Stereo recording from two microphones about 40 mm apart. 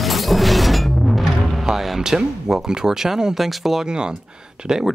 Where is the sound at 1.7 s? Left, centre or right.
Centre.